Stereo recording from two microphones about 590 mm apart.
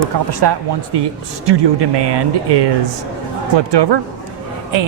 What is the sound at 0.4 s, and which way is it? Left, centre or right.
Speech, right.